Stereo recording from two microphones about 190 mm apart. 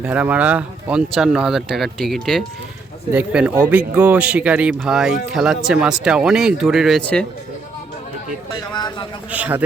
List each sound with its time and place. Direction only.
0.0 s speech: 5° right (ahead or behind)
8.7 s a man's voice: 20° left (ahead or behind)
9.3 s speech: 10° right (ahead or behind)